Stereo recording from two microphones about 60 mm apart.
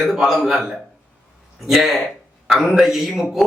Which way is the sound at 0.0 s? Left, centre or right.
Centre.